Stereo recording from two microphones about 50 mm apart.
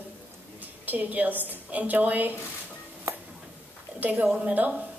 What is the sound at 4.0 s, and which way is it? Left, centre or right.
Speech, right.